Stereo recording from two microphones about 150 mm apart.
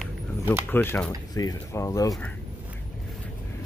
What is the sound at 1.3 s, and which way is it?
Speech, 25° left (ahead or behind).